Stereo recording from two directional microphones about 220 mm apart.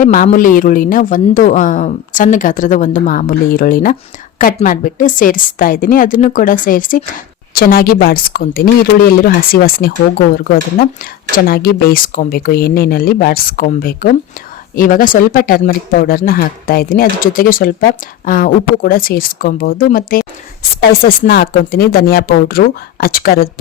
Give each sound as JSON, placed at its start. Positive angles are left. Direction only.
{"t": 0.0, "sound": "speech", "side_deg": 35}